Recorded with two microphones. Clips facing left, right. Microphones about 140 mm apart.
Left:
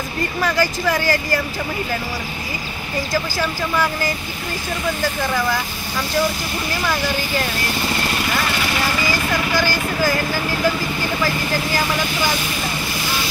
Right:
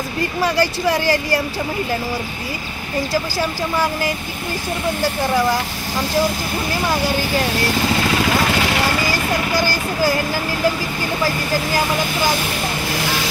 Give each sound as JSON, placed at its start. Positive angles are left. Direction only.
{"t": 0.4, "sound": "speech", "side_deg": -35}
{"t": 3.3, "sound": "speech", "side_deg": -30}
{"t": 9.5, "sound": "speech", "side_deg": -35}